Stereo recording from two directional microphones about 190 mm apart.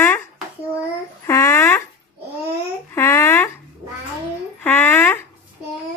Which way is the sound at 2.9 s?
15° left (ahead or behind).